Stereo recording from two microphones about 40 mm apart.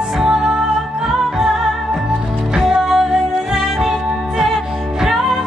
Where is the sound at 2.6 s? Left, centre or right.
Centre.